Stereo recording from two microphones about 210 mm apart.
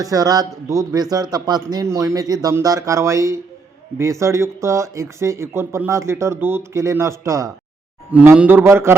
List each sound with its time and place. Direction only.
0.0 s speech: 15° right (ahead or behind)